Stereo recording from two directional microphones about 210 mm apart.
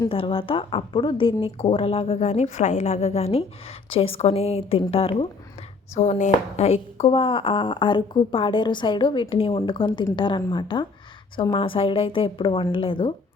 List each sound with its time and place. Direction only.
0.0 s speech: 25° left (ahead or behind)